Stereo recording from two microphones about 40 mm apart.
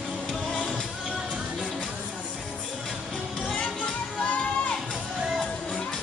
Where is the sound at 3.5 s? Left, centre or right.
Left.